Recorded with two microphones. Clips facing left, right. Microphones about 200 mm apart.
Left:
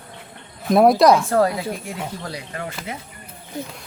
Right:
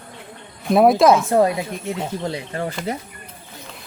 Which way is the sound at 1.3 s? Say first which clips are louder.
Right 2 dB; 20° right (ahead or behind).